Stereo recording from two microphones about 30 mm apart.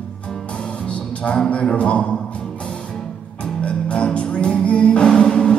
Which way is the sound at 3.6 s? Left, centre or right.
Left.